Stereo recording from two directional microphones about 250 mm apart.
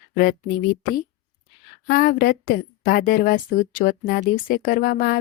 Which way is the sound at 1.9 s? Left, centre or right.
Left.